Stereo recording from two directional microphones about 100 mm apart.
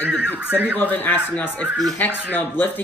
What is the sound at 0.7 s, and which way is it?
Speech, 20° left (ahead or behind).